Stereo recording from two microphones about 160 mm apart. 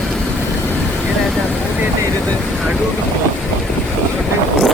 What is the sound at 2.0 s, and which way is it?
Speech, 5° left (ahead or behind).